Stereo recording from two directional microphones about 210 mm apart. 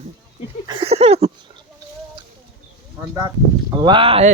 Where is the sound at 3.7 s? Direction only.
20° right (ahead or behind).